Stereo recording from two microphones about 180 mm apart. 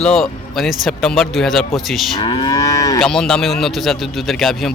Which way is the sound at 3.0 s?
5° left (ahead or behind).